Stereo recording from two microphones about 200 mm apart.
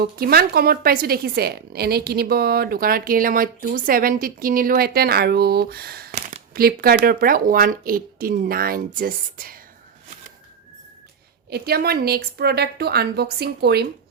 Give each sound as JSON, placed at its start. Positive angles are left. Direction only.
{"t": 0.0, "sound": "a woman's voice", "side_deg": -50}
{"t": 11.4, "sound": "a woman's voice", "side_deg": -50}